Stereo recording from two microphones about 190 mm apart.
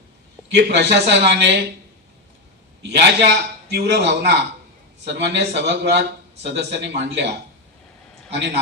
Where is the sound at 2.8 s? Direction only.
65° right (ahead or behind).